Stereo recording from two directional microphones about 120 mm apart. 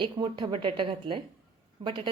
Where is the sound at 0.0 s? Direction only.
45° right (ahead or behind).